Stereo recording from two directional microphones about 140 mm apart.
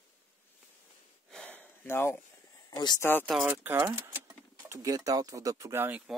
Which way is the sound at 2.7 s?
30° left (ahead or behind).